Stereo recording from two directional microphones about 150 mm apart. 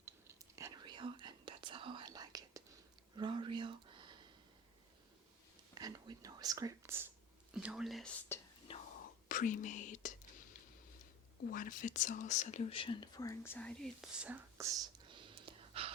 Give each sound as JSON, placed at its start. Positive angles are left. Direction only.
{"t": 0.0, "sound": "whispering", "side_deg": -20}
{"t": 3.2, "sound": "a sound", "side_deg": -30}
{"t": 5.7, "sound": "whispering", "side_deg": -25}
{"t": 7.5, "sound": "speech", "side_deg": -5}
{"t": 8.7, "sound": "whispering", "side_deg": 40}
{"t": 9.3, "sound": "speech", "side_deg": 60}
{"t": 11.4, "sound": "speech", "side_deg": 65}
{"t": 14.2, "sound": "speech", "side_deg": -10}
{"t": 14.7, "sound": "whispering", "side_deg": -30}